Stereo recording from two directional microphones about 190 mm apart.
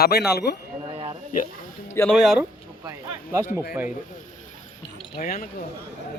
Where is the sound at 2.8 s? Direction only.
15° right (ahead or behind).